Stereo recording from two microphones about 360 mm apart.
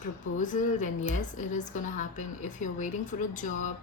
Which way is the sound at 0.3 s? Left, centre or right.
Left.